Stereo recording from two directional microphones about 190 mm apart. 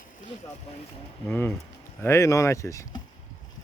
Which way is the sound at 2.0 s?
15° left (ahead or behind).